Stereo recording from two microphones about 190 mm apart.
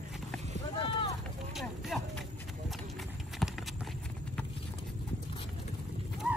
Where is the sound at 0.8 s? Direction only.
20° left (ahead or behind).